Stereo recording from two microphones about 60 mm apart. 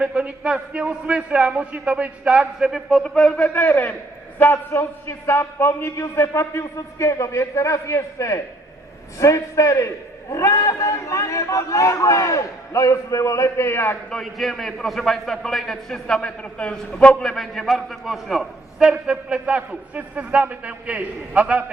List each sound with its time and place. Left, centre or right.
0.0 s a man's voice: centre
3.0 s a man's voice: centre
3.4 s a man's voice: left
4.5 s a man's voice: left
13.7 s a man's voice: left
14.1 s a man's voice: centre
17.3 s a man's voice: centre; by 21.6 s right